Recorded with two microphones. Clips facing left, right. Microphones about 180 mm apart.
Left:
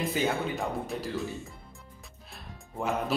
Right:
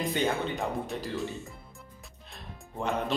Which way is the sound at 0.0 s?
5° left (ahead or behind).